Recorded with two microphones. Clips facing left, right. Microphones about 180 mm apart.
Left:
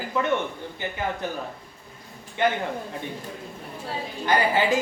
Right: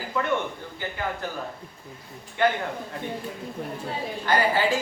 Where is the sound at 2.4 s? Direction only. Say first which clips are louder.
Right 1 dB; 20° left (ahead or behind).